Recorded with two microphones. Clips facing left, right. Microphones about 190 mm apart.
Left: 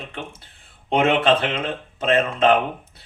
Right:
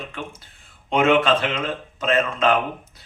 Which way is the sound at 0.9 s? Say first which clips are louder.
Even; 30° left (ahead or behind).